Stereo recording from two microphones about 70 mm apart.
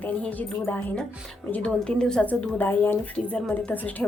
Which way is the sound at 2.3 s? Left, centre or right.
Left.